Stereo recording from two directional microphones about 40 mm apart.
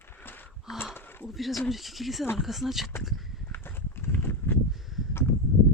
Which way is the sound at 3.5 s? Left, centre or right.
Left.